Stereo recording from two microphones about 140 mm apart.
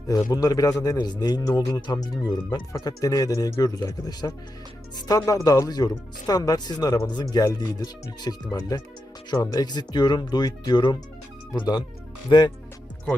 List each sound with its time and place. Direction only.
0.1 s a man's voice: 30° left (ahead or behind)